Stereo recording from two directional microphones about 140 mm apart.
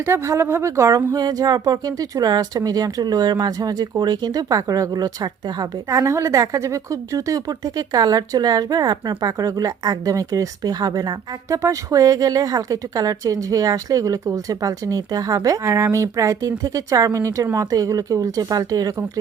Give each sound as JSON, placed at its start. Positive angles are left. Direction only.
{"t": 0.0, "sound": "a woman's voice", "side_deg": -15}